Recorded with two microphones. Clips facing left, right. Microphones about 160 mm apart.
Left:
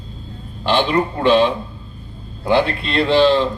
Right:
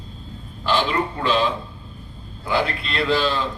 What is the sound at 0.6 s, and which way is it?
A man's voice, 25° left (ahead or behind).